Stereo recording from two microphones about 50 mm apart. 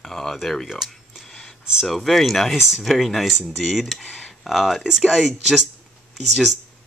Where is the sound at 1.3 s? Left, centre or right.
Centre.